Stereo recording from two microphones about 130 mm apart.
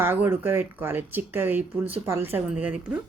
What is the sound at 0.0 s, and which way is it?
Speech, 15° right (ahead or behind).